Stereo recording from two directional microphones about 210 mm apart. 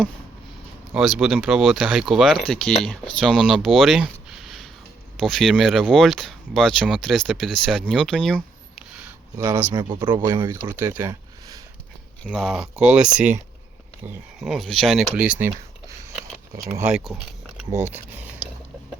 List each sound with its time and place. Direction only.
0.9 s speech: centre (ahead or behind)
9.4 s speech: 10° right (ahead or behind)
10.7 s speech: 10° right (ahead or behind)
12.3 s speech: centre (ahead or behind)
14.3 s speech: centre (ahead or behind)
16.6 s speech: 15° right (ahead or behind)